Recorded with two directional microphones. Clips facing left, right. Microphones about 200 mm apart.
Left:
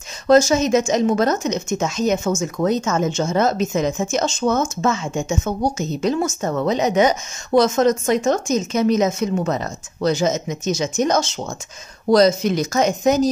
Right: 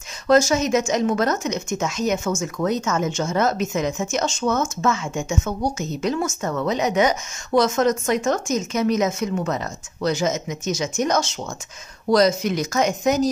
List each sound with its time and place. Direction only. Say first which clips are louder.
0.3 s a woman's voice: left 3 dB; 25° left (ahead or behind)